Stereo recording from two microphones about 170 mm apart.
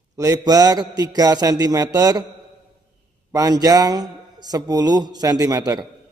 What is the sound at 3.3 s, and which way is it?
A man's voice, 20° right (ahead or behind).